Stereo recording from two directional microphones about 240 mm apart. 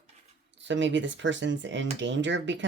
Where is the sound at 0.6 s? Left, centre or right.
Right.